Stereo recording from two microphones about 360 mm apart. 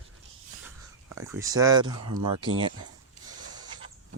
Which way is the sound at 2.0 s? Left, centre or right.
Right.